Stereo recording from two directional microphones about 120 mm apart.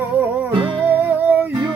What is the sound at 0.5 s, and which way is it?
Music, 45° right (ahead or behind).